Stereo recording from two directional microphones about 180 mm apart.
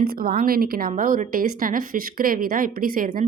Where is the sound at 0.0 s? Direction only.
55° right (ahead or behind).